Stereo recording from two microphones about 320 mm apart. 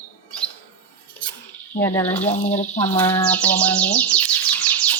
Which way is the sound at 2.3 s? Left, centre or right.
Centre.